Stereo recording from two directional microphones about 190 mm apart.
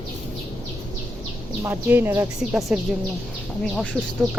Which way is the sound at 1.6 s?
10° right (ahead or behind).